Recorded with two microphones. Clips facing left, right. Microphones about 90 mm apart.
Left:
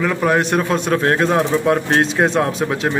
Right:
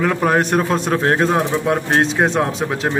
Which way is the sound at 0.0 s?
35° right (ahead or behind).